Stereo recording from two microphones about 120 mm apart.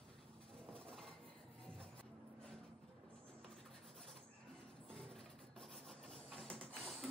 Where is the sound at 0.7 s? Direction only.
Centre (ahead or behind).